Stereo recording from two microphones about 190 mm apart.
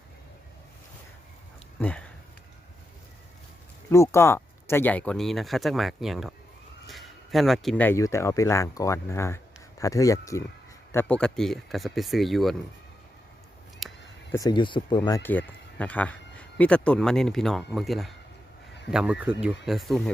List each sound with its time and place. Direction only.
1.8 s speech: 5° left (ahead or behind)
3.8 s speech: 15° left (ahead or behind)
10.9 s speech: 5° left (ahead or behind)
13.8 s a sound: centre (ahead or behind)
14.3 s speech: 20° left (ahead or behind)
15.2 s speech: 10° left (ahead or behind)